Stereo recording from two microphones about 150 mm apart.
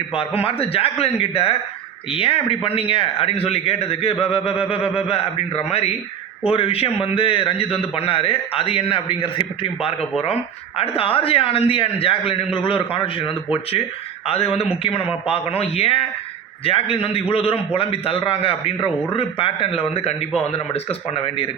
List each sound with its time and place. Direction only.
0.1 s a man's voice: 40° left (ahead or behind)